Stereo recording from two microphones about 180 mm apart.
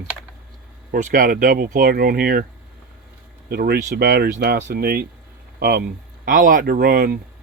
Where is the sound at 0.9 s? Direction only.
50° right (ahead or behind).